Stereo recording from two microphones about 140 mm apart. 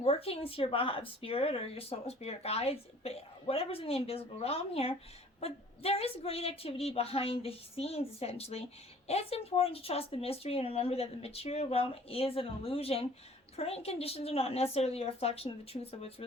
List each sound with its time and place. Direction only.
0.0 s speech: 45° left (ahead or behind)